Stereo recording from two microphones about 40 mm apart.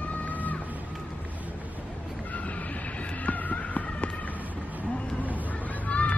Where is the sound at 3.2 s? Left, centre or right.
Left.